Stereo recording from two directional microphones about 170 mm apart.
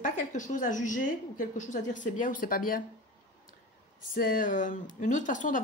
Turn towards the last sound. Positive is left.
turn(degrees=50)  # may be behind; listen again after turning